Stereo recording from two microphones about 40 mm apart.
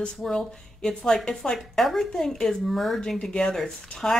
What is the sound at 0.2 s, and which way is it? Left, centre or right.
Speech, centre.